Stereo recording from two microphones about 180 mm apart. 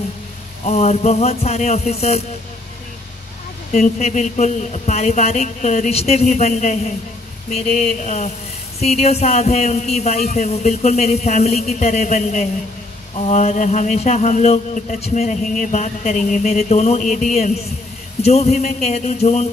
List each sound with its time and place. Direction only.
0.7 s mantra: 35° left (ahead or behind)
3.7 s mantra: 40° left (ahead or behind)
8.0 s mantra: 40° left (ahead or behind)